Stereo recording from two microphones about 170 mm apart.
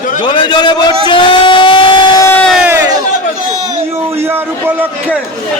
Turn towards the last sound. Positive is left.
turn(degrees=-10)  # may be behind; listen again after turning